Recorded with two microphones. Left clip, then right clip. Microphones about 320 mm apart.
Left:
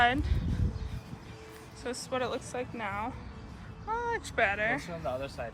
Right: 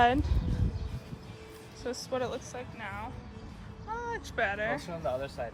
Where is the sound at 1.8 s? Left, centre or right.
Centre.